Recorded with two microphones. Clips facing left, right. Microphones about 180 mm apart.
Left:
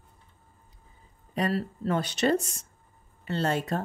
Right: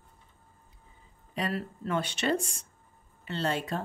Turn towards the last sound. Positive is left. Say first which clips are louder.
# left 3 dB
turn(degrees=45)  # may be behind; listen again after turning